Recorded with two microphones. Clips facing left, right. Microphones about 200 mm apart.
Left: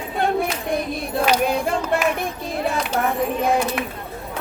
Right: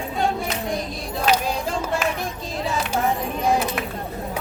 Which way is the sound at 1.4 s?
60° left (ahead or behind).